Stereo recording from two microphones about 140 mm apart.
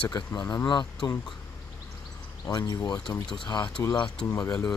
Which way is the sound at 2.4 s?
25° left (ahead or behind).